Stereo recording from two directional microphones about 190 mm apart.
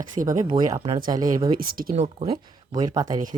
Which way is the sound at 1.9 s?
35° right (ahead or behind).